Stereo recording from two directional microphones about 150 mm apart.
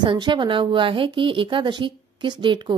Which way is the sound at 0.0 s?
30° right (ahead or behind).